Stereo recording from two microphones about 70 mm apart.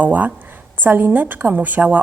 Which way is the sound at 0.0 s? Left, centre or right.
Right.